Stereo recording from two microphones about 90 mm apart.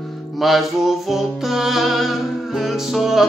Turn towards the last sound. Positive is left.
turn(degrees=-5)  # may be behind; listen again after turning